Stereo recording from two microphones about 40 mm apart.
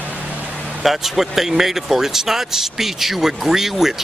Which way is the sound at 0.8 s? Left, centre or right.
Centre.